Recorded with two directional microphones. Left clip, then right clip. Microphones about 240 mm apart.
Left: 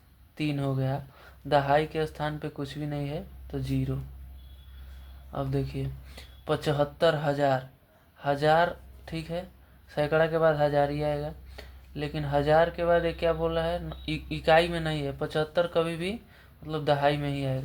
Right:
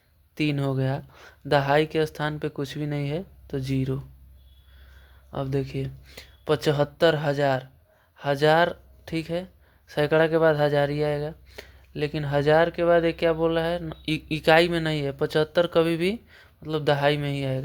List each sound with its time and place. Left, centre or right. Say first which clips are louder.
0.3 s speech: right 5 dB; right
5.3 s speech: right 3 dB; right